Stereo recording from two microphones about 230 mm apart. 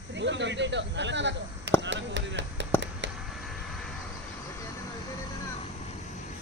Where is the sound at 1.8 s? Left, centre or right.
Right.